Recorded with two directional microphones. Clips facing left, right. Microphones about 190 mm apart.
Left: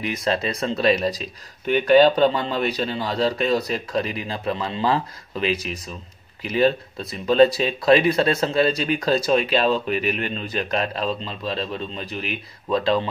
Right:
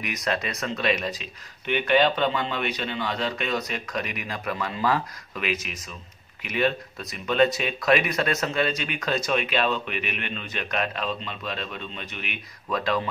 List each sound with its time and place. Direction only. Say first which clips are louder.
0.0 s speech: left 5 dB; 30° left (ahead or behind)